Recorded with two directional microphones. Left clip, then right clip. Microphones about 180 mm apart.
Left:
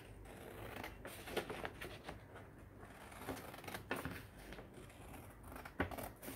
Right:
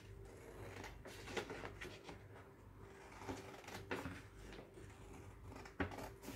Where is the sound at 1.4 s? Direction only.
25° left (ahead or behind).